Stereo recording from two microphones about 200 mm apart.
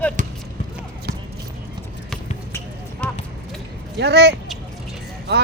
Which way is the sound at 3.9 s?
55° right (ahead or behind).